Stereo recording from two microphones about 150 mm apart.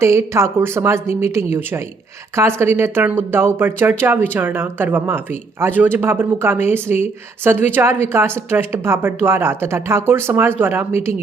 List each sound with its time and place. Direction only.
0.0 s speech: 20° right (ahead or behind)